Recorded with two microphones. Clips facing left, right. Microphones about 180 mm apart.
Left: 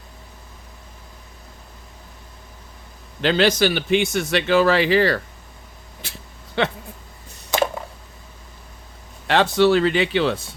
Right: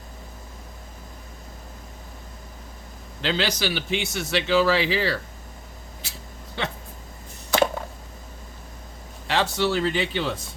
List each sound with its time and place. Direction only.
3.2 s a man's voice: 55° left (ahead or behind)
6.6 s speech: 70° left (ahead or behind)
9.2 s speech: 65° left (ahead or behind)